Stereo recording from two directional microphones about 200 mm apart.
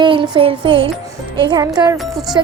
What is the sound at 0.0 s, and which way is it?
A woman's voice, 25° right (ahead or behind).